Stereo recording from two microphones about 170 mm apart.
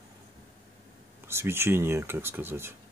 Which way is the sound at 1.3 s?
15° right (ahead or behind).